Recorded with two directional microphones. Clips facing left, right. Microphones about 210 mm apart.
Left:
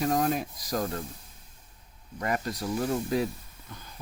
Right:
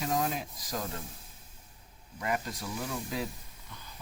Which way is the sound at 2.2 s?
45° left (ahead or behind).